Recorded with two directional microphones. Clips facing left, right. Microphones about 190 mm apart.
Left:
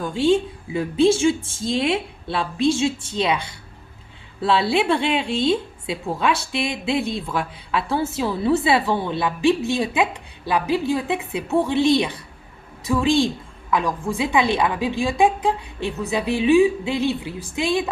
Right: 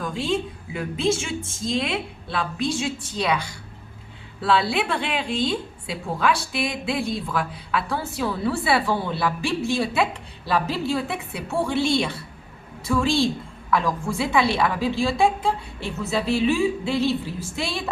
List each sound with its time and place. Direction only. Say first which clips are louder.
0.0 s a woman's voice: left 7 dB; 30° left (ahead or behind)